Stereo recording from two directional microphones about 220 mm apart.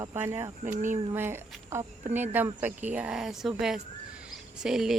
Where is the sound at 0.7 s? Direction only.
35° right (ahead or behind).